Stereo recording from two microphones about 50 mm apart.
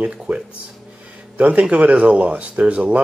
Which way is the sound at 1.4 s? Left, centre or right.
Right.